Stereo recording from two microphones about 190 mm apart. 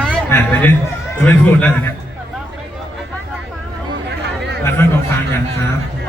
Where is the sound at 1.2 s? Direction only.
5° left (ahead or behind).